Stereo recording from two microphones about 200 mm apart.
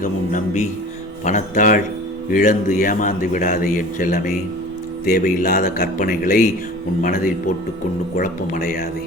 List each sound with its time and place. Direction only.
0.0 s a man's voice: 40° left (ahead or behind)